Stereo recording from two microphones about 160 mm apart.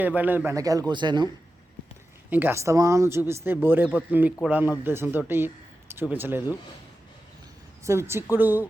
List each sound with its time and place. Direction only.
0.0 s a man's voice: 10° right (ahead or behind); by 1.3 s 30° right (ahead or behind)
2.3 s speech: 15° right (ahead or behind)
7.9 s speech: 15° right (ahead or behind)